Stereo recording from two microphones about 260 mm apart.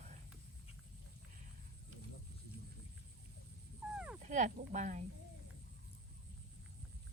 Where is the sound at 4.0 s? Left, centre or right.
Centre.